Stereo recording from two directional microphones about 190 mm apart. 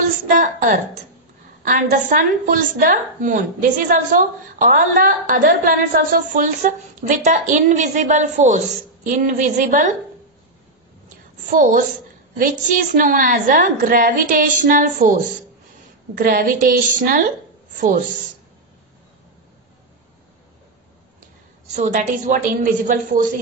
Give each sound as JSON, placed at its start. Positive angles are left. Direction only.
{"t": 0.3, "sound": "a woman's voice", "side_deg": -45}
{"t": 11.5, "sound": "a woman's voice", "side_deg": -45}
{"t": 21.7, "sound": "a woman's voice", "side_deg": -40}